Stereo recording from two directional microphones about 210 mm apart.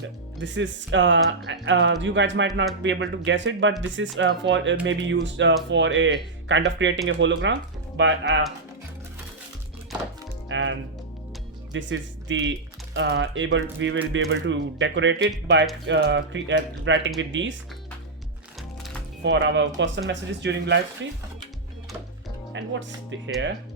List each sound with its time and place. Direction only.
0.3 s speech: 60° right (ahead or behind)
10.5 s music: 60° right (ahead or behind)
11.7 s speech: 60° right (ahead or behind)
19.2 s speech: 60° right (ahead or behind)
22.5 s speech: 60° right (ahead or behind)